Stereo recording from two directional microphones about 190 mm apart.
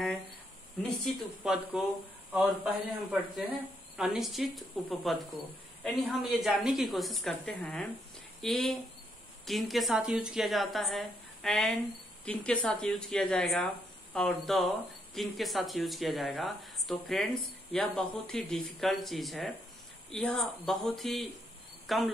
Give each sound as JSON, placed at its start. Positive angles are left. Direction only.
{"t": 1.0, "sound": "a woman's voice", "side_deg": -5}